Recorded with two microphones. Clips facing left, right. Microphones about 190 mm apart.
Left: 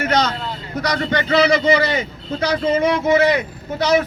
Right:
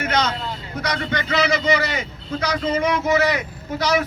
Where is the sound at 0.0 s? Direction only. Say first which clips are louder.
Left 3 dB; 35° left (ahead or behind).